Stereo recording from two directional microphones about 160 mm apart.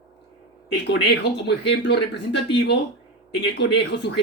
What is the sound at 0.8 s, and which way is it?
Speech, 90° left.